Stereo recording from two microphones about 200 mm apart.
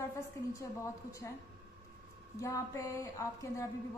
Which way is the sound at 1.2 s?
10° left (ahead or behind).